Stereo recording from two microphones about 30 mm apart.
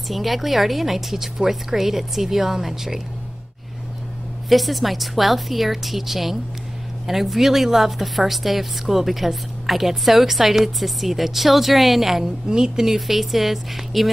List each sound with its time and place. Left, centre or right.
0.1 s a woman's voice: centre
4.5 s a woman's voice: centre
12.4 s a woman's voice: right
12.8 s a woman's voice: centre